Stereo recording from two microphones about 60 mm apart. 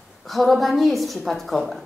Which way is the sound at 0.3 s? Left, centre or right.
Centre.